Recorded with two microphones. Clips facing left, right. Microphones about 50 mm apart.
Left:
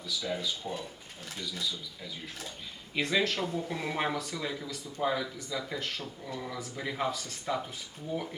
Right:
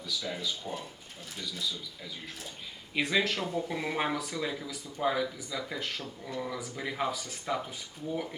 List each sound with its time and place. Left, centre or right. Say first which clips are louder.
0.2 s speech: left 3 dB; centre
2.9 s speech: even; centre